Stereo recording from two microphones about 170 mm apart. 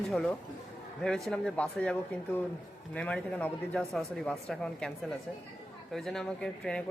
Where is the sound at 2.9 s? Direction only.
5° left (ahead or behind).